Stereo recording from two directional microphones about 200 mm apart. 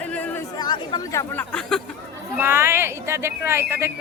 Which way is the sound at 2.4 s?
10° right (ahead or behind).